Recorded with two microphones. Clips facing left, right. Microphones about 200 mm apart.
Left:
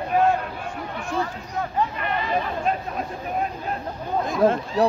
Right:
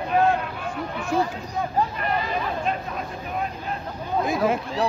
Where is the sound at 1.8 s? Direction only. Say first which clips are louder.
Right 1 dB; 35° right (ahead or behind).